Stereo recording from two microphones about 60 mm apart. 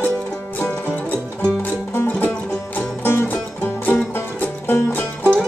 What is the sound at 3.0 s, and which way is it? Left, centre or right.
Music, left.